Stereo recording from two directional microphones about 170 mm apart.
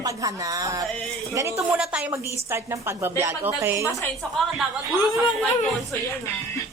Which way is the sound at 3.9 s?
20° left (ahead or behind).